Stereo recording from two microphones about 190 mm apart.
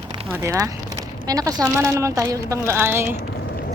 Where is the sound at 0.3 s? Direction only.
10° right (ahead or behind).